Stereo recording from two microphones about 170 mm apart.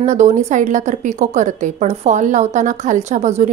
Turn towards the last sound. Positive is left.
turn(degrees=-45)  # may be behind; listen again after turning